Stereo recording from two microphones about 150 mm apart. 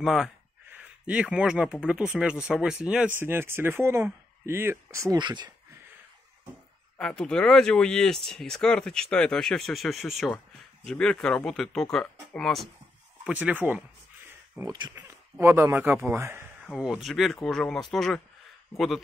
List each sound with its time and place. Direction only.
0.0 s speech: centre (ahead or behind); by 5.5 s 30° right (ahead or behind)
7.0 s speech: 5° left (ahead or behind)
13.2 s speech: 10° right (ahead or behind)
14.6 s speech: 25° right (ahead or behind)
15.0 s speech: 15° right (ahead or behind)
16.6 s speech: 5° right (ahead or behind)